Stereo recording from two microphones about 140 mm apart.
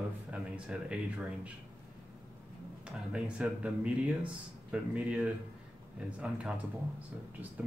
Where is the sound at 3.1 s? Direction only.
10° right (ahead or behind).